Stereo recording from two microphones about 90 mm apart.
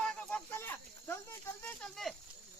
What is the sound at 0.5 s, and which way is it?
Cricket, 25° left (ahead or behind).